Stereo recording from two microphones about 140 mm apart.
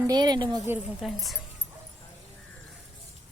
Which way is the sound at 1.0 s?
Centre (ahead or behind).